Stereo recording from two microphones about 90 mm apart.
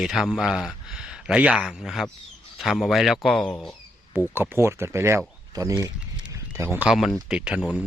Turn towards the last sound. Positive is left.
turn(degrees=-10)  # may be behind; listen again after turning